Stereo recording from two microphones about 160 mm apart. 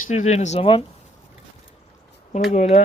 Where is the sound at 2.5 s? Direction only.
40° left (ahead or behind).